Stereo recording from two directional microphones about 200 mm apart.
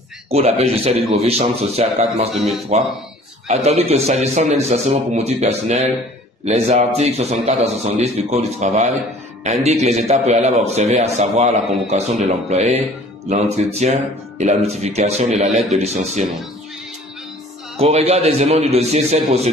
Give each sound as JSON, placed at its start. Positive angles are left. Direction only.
{"t": 0.3, "sound": "a man's voice", "side_deg": -30}
{"t": 2.3, "sound": "speech", "side_deg": 0}
{"t": 3.4, "sound": "a man's voice", "side_deg": -30}
{"t": 17.7, "sound": "a man's voice", "side_deg": -30}